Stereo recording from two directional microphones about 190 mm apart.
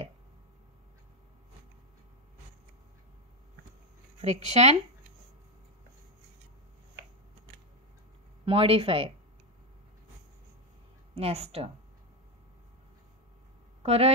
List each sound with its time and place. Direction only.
4.2 s speech: 35° right (ahead or behind)
8.5 s speech: 30° right (ahead or behind)
11.1 s speech: 30° right (ahead or behind)
13.8 s speech: 30° right (ahead or behind)